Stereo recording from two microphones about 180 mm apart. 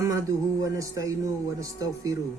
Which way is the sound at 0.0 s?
15° right (ahead or behind).